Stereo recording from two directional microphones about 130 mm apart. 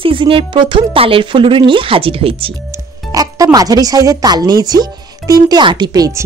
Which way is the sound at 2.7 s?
25° right (ahead or behind).